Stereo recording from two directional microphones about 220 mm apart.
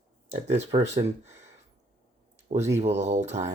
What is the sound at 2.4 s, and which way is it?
Speech, 30° right (ahead or behind).